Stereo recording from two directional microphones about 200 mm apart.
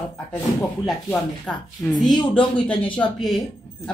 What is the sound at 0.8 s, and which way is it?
Speech, 5° left (ahead or behind).